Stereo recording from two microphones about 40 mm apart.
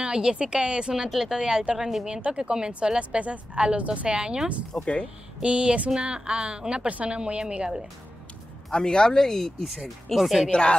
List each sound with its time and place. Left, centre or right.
0.0 s a woman's voice: right
2.2 s a woman's voice: right
3.0 s a woman's voice: right
4.7 s speech: left
5.4 s a woman's voice: right
6.9 s speech: right
7.2 s a woman's voice: right
8.7 s speech: centre
10.1 s speech: centre
10.5 s speech: left